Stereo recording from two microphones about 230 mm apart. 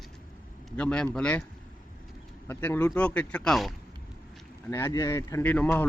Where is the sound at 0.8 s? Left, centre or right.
Centre.